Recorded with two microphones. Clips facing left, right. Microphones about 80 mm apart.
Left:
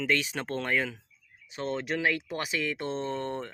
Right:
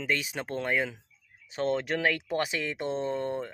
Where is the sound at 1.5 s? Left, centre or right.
Right.